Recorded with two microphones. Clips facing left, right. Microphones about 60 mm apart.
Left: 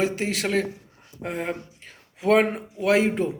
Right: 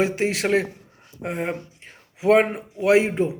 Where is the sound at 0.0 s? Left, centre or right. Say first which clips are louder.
Right 3 dB; right.